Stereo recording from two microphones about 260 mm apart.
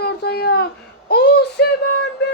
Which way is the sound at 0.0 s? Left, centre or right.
Left.